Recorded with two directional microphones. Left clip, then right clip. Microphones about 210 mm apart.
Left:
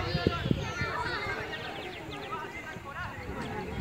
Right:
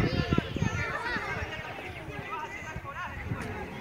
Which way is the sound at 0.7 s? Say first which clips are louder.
Right 3 dB; 50° left (ahead or behind).